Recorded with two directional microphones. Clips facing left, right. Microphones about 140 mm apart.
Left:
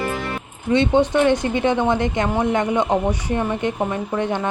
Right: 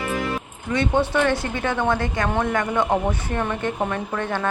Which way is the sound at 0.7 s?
20° left (ahead or behind).